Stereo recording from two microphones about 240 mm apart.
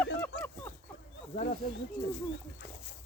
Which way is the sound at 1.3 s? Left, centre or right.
Left.